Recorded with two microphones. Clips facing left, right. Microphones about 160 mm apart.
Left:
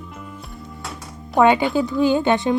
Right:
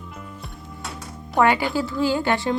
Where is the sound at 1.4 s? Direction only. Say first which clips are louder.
Left 4 dB; 20° left (ahead or behind).